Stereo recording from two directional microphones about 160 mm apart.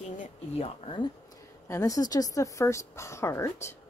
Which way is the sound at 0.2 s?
40° left (ahead or behind).